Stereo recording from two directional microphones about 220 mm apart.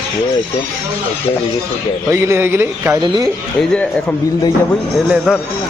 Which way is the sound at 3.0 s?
20° right (ahead or behind).